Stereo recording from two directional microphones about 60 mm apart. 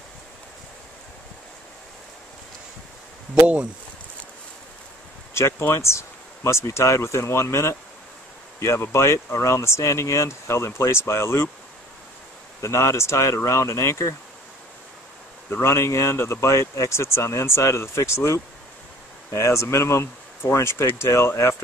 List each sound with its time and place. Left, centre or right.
5.3 s speech: left
12.6 s speech: left
15.5 s speech: left